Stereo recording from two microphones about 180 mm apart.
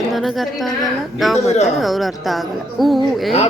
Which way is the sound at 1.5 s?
40° left (ahead or behind).